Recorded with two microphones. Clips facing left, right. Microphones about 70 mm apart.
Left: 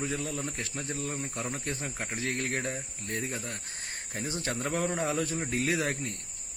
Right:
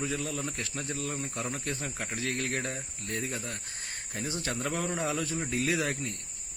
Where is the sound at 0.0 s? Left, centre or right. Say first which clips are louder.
Even; left.